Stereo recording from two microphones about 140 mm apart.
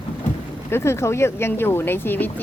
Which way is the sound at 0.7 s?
20° left (ahead or behind).